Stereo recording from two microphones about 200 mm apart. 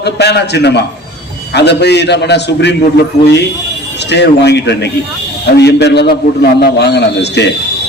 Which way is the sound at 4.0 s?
55° left (ahead or behind).